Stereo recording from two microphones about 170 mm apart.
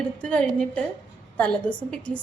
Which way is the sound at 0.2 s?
5° left (ahead or behind).